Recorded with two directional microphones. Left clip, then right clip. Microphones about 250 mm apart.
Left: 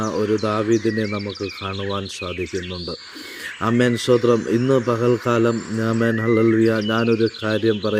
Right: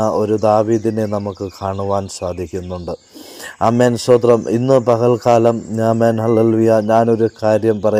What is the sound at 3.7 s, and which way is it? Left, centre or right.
Speech, centre.